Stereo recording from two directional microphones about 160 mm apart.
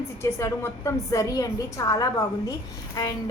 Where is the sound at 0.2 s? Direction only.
15° left (ahead or behind).